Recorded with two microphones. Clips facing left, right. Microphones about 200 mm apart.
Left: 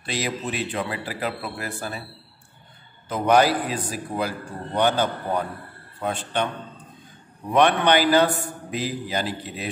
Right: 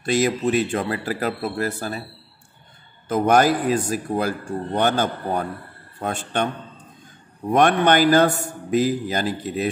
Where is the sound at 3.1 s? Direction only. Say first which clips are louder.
Right 2 dB; 45° right (ahead or behind).